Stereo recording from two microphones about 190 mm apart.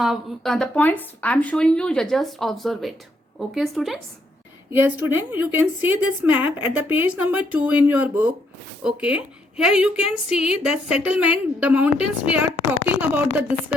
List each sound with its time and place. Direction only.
0.0 s a woman's voice: centre (ahead or behind)